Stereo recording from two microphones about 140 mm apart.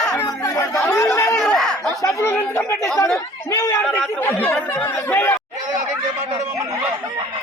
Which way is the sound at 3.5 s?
25° left (ahead or behind).